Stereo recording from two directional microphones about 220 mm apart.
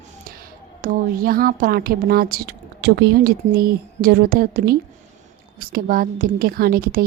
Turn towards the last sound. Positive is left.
turn(degrees=-40)  # may be behind; listen again after turning